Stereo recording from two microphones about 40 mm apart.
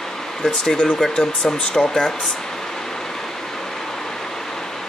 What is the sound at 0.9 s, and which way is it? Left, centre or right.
Speech, centre.